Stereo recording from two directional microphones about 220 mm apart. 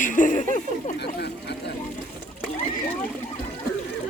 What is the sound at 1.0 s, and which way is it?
Speech, 50° left (ahead or behind).